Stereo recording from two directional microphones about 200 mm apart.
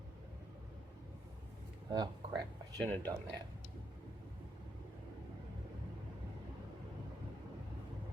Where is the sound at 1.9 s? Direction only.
20° right (ahead or behind).